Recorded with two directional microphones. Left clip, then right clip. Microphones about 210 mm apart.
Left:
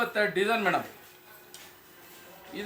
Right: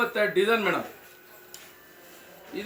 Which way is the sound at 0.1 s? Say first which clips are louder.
Right 3 dB; 25° left (ahead or behind).